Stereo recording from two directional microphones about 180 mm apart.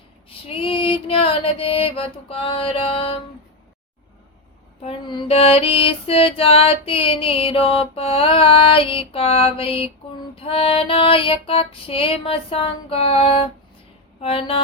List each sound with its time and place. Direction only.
0.3 s mantra: 30° left (ahead or behind)
4.8 s female singing: 35° left (ahead or behind)